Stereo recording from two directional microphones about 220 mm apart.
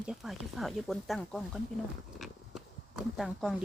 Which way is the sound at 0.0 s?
Centre (ahead or behind).